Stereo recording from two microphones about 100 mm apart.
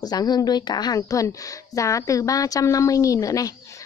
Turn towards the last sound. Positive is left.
turn(degrees=35)  # may be behind; listen again after turning